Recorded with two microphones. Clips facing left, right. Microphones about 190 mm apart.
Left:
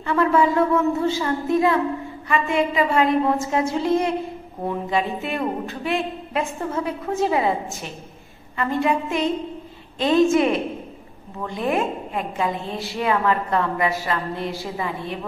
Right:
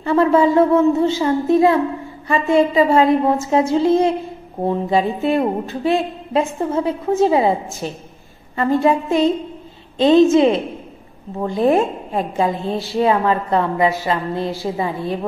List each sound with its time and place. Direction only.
0.0 s a woman's voice: 30° right (ahead or behind)